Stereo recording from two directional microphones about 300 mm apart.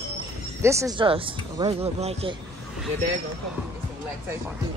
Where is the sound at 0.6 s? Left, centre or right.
Centre.